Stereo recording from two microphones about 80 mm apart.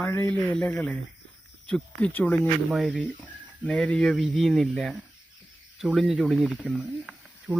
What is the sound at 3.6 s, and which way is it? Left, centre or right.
Speech, centre.